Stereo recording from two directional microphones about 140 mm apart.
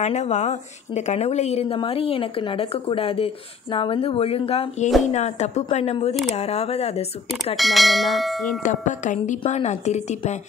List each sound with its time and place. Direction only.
0.0 s a woman's voice: 55° left (ahead or behind)
7.5 s bell: centre (ahead or behind)
8.6 s a woman's voice: 65° left (ahead or behind)